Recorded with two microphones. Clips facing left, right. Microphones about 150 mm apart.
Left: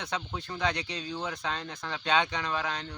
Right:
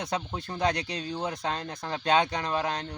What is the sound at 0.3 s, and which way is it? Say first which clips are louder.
Speech: right 2 dB; 35° right (ahead or behind).